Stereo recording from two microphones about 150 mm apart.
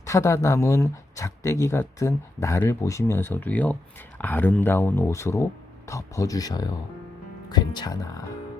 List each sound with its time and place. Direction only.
0.0 s speech: 20° left (ahead or behind)